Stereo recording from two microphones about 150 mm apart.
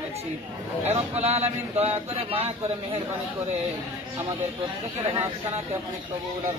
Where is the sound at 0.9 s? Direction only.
45° right (ahead or behind).